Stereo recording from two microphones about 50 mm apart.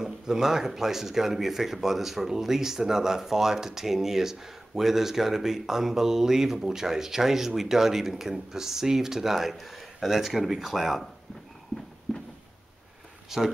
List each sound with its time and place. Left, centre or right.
0.0 s speech: centre
12.1 s a sound: centre
13.3 s speech: centre